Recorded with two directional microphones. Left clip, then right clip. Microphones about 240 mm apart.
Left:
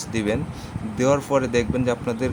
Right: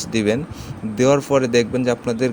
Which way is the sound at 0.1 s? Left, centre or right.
Centre.